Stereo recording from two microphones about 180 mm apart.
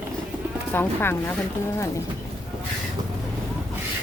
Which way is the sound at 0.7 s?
10° left (ahead or behind).